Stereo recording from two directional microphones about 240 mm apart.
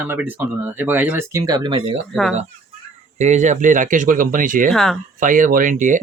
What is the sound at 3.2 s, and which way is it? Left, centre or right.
Speech, right.